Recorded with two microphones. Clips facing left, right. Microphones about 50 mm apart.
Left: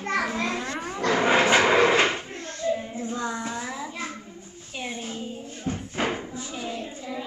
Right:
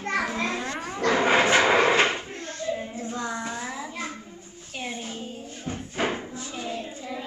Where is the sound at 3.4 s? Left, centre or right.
Centre.